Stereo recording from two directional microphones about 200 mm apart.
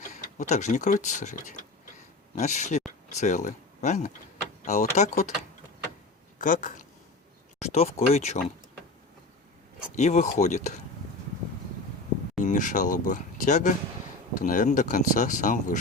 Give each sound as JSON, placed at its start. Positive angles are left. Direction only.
{"t": 0.3, "sound": "speech", "side_deg": 35}
{"t": 9.9, "sound": "speech", "side_deg": 35}
{"t": 12.4, "sound": "speech", "side_deg": 40}